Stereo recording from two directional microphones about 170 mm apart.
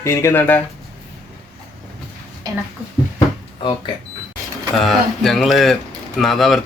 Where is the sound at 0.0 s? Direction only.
15° left (ahead or behind).